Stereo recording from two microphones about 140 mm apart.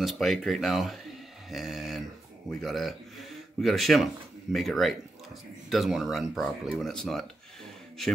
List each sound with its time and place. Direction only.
0.0 s speech: centre (ahead or behind)